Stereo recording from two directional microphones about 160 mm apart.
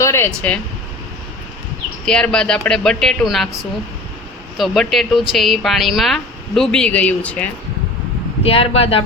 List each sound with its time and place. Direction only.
0.0 s speech: 15° left (ahead or behind)
2.0 s a woman's voice: 5° left (ahead or behind)
4.5 s a woman's voice: centre (ahead or behind)
8.4 s speech: 35° left (ahead or behind)